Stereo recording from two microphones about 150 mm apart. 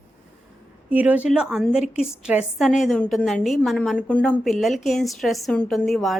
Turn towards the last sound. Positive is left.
turn(degrees=0)  # may be behind; listen again after turning